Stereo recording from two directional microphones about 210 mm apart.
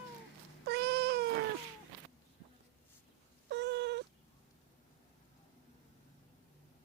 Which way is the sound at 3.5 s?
55° right (ahead or behind).